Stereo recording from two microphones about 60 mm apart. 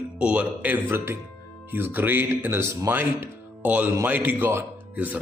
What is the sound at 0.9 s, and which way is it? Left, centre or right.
Speech, right.